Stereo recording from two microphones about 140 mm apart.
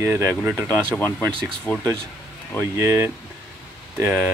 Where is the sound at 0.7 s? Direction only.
15° left (ahead or behind).